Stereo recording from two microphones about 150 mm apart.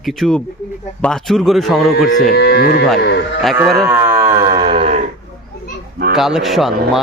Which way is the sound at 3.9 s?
15° right (ahead or behind).